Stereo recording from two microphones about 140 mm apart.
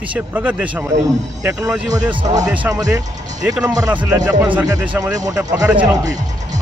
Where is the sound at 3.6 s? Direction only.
20° right (ahead or behind).